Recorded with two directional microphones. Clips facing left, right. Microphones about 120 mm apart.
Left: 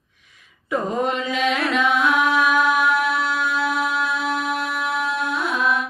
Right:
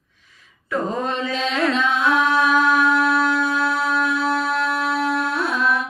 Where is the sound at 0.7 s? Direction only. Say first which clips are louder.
Even; 15° left (ahead or behind).